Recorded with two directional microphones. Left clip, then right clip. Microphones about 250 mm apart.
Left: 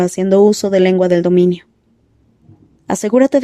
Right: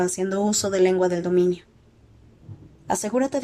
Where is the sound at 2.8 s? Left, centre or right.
Left.